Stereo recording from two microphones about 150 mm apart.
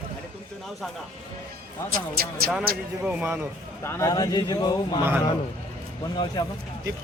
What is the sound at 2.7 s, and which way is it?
Speech, 90° right.